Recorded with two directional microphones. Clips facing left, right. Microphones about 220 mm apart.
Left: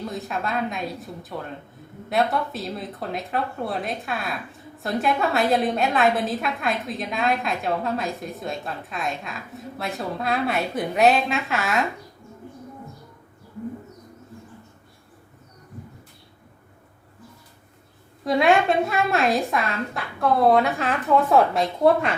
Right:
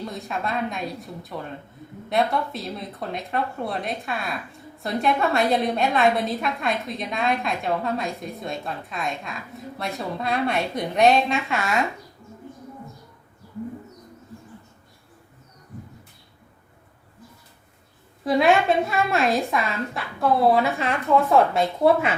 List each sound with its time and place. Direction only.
0.0 s a woman's voice: centre (ahead or behind)
18.3 s a woman's voice: centre (ahead or behind)